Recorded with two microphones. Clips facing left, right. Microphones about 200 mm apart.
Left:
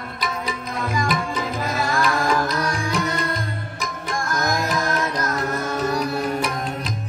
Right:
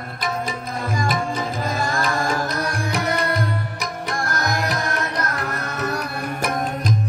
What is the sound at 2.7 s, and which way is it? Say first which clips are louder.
Music: right 1 dB; 60° right (ahead or behind).